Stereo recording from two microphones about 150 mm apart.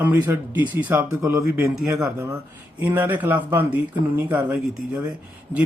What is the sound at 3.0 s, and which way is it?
A man's voice, 10° right (ahead or behind).